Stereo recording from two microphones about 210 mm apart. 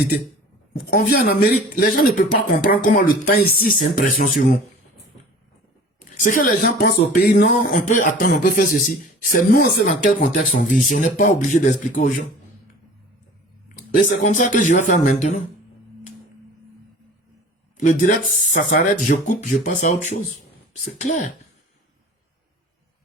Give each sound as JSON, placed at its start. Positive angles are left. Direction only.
{"t": 0.7, "sound": "speech", "side_deg": 45}
{"t": 6.2, "sound": "speech", "side_deg": 40}
{"t": 13.9, "sound": "speech", "side_deg": 35}
{"t": 17.7, "sound": "speech", "side_deg": 35}